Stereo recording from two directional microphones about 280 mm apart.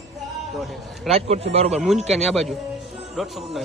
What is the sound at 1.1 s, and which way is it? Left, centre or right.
Speech, right.